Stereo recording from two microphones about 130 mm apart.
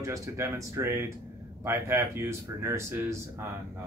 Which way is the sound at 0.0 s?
25° right (ahead or behind).